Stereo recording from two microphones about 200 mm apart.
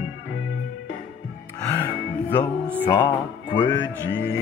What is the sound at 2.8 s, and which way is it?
Music, 20° left (ahead or behind).